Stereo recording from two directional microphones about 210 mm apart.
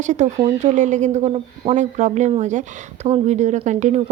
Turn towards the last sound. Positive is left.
turn(degrees=-30)  # may be behind; listen again after turning